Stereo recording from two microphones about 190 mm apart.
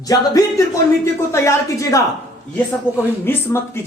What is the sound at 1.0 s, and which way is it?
Speech, 15° left (ahead or behind).